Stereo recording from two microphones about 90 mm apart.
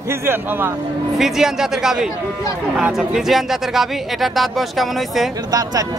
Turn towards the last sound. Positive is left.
turn(degrees=-45)  # may be behind; listen again after turning